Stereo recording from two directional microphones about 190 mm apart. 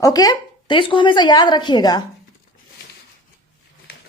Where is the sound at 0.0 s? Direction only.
20° left (ahead or behind).